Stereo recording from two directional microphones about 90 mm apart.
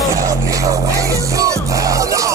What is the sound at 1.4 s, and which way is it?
Music, 35° right (ahead or behind).